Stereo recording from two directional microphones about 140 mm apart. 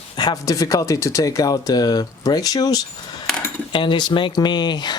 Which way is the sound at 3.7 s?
35° left (ahead or behind).